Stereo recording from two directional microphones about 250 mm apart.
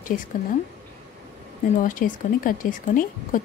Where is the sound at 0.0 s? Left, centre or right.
Left.